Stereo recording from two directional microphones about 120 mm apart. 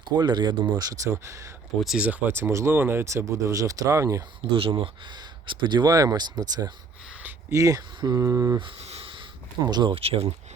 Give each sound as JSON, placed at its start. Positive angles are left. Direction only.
{"t": 0.0, "sound": "speech", "side_deg": -35}
{"t": 1.8, "sound": "speech", "side_deg": 0}
{"t": 2.0, "sound": "speech", "side_deg": -15}
{"t": 4.4, "sound": "speech", "side_deg": -50}
{"t": 7.5, "sound": "speech", "side_deg": -30}
{"t": 8.8, "sound": "a sound", "side_deg": -55}
{"t": 9.6, "sound": "speech", "side_deg": -35}
{"t": 9.9, "sound": "speech", "side_deg": -55}